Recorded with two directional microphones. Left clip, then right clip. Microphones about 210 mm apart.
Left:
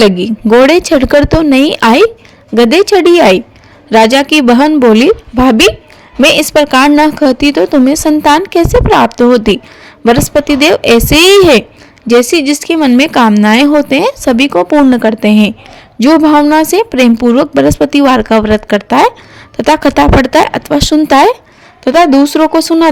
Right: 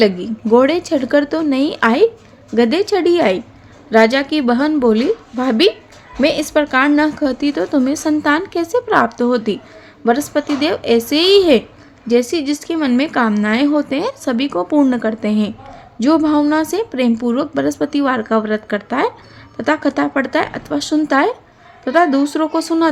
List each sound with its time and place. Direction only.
0.0 s speech: 40° left (ahead or behind)